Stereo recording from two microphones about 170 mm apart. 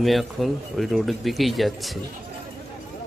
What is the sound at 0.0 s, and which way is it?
A man's voice, centre (ahead or behind).